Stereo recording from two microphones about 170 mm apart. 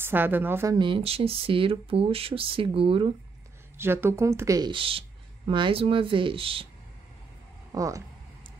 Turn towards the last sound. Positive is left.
turn(degrees=-20)  # may be behind; listen again after turning